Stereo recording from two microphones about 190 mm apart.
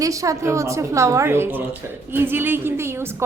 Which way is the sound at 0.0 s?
15° right (ahead or behind).